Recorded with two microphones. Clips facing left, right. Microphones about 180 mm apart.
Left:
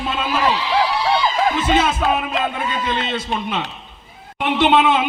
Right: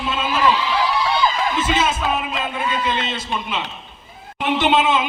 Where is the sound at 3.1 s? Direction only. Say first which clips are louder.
Left 3 dB; 60° left (ahead or behind).